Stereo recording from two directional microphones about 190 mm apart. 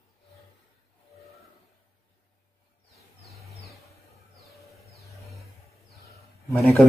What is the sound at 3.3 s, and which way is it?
Vehicle, centre (ahead or behind).